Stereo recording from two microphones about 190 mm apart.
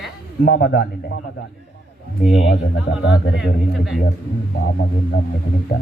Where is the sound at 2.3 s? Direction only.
70° left (ahead or behind).